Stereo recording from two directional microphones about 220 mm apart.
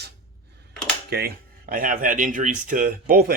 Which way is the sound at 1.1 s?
45° right (ahead or behind).